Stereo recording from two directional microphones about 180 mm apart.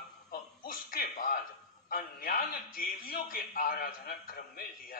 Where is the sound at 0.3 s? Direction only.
50° left (ahead or behind).